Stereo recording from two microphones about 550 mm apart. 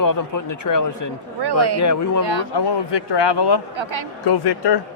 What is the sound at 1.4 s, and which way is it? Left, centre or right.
Speech, right.